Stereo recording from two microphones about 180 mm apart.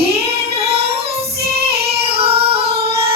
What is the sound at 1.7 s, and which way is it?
Yodeling, 30° right (ahead or behind).